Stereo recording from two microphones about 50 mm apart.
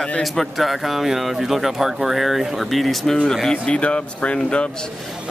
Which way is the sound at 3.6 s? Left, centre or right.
Left.